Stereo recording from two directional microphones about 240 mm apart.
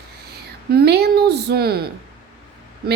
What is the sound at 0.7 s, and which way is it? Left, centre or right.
A woman's voice, right.